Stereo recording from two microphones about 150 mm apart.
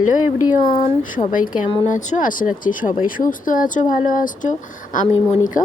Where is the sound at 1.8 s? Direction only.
60° left (ahead or behind).